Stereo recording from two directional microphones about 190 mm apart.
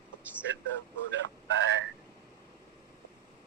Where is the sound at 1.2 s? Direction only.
80° right.